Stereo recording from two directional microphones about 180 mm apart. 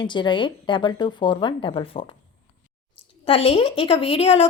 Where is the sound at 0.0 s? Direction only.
25° left (ahead or behind).